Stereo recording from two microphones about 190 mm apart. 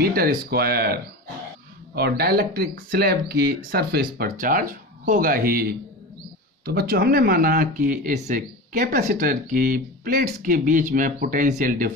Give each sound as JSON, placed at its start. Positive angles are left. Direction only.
{"t": 0.0, "sound": "speech", "side_deg": -50}